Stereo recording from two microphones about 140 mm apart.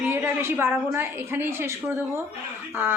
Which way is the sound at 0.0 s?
15° right (ahead or behind).